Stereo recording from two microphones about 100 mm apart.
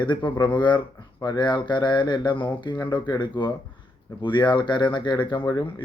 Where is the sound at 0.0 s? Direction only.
50° left (ahead or behind).